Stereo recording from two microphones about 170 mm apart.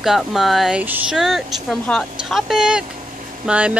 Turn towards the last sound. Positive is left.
turn(degrees=-5)  # may be behind; listen again after turning